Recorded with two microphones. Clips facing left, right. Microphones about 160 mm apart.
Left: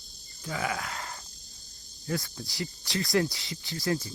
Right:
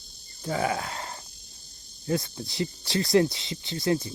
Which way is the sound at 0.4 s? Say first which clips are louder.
Right 5 dB; 35° right (ahead or behind).